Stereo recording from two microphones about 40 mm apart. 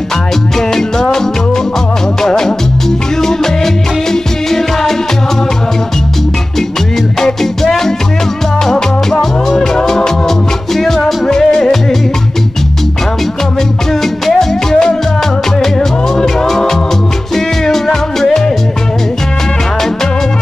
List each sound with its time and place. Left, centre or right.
0.6 s music: centre
2.2 s music: centre
7.2 s music: centre
14.2 s music: centre